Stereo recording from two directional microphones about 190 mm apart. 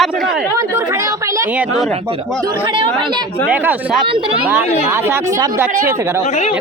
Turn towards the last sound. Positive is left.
turn(degrees=-15)  # may be behind; listen again after turning